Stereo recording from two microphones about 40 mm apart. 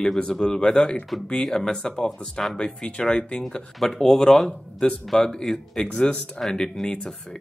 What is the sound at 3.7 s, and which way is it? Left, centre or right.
Speech, centre.